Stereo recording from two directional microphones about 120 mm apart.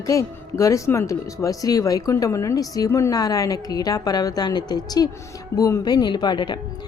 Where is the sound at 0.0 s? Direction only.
25° left (ahead or behind).